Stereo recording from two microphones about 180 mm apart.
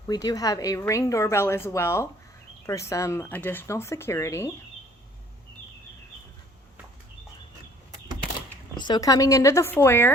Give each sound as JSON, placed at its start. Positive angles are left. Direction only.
{"t": 0.1, "sound": "a woman's voice", "side_deg": 20}
{"t": 8.7, "sound": "a woman's voice", "side_deg": 25}